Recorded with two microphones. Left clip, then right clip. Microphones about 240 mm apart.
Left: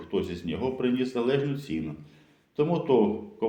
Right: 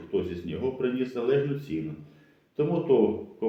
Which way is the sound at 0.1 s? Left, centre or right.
Left.